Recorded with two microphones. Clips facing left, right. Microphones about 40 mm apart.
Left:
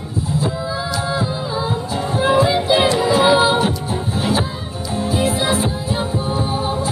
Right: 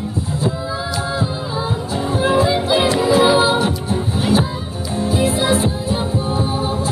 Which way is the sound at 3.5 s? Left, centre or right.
Centre.